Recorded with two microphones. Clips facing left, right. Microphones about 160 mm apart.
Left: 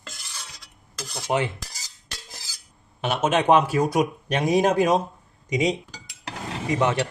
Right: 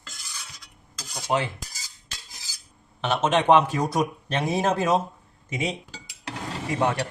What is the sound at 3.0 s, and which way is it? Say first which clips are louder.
Speech: even; 10° left (ahead or behind).